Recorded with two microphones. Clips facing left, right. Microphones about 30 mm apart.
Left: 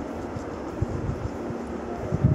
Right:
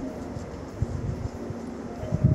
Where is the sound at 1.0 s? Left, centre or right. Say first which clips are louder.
Left 3 dB; left.